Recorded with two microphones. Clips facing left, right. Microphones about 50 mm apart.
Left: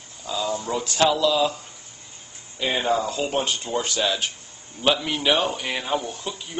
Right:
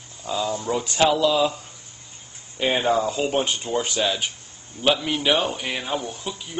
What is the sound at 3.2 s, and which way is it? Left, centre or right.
Speech, centre.